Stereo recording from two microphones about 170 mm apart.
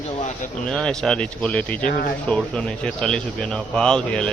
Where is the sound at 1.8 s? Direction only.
60° left (ahead or behind).